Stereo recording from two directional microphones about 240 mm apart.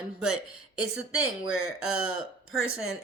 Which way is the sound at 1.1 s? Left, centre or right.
Left.